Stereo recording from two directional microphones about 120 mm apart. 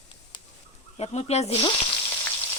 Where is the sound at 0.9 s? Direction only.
60° left (ahead or behind).